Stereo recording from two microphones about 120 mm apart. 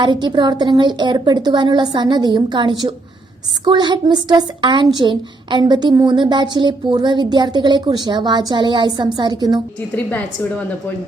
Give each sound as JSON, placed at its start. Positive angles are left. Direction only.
{"t": 0.0, "sound": "a woman's voice", "side_deg": -40}
{"t": 9.9, "sound": "a woman's voice", "side_deg": 10}